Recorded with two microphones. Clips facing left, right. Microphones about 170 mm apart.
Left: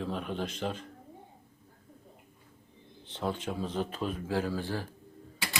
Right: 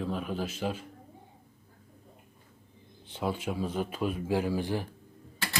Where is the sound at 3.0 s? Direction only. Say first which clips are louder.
Right 2 dB; 10° right (ahead or behind).